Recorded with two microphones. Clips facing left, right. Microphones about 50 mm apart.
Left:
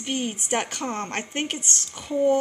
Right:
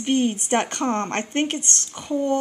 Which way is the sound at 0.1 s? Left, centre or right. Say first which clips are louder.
Right 6 dB; centre.